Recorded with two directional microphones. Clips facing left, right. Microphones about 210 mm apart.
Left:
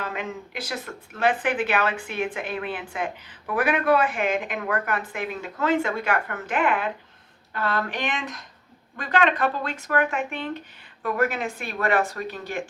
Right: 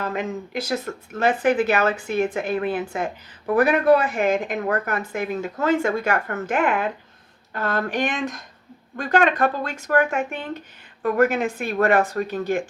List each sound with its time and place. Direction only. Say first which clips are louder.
0.0 s speech: right 5 dB; 40° right (ahead or behind)